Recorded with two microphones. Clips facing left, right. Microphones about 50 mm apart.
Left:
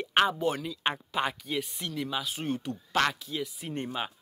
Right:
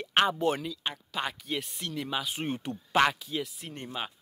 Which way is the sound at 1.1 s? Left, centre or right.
Centre.